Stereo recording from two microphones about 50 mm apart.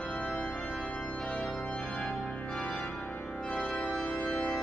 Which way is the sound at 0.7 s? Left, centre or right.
Left.